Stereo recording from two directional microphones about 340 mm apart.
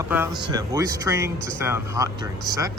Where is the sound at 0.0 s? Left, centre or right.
Centre.